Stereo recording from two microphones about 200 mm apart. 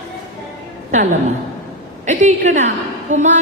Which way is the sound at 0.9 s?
35° right (ahead or behind).